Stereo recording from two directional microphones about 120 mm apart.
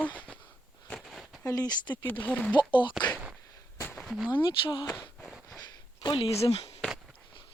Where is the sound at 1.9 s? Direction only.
15° left (ahead or behind).